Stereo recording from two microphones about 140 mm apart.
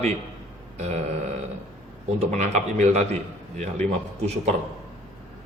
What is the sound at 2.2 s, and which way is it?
A man's voice, 50° right (ahead or behind).